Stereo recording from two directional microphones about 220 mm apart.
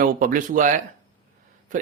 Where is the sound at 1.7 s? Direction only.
35° right (ahead or behind).